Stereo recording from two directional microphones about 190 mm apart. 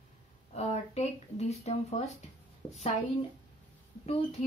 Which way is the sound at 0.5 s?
35° left (ahead or behind).